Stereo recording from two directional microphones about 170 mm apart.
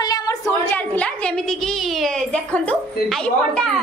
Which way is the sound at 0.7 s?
10° left (ahead or behind).